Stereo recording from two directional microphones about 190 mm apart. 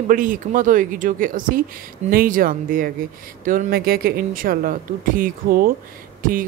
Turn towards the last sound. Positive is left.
turn(degrees=-45)  # may be behind; listen again after turning